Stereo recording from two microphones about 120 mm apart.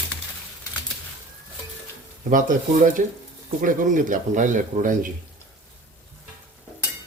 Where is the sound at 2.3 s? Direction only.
90° right.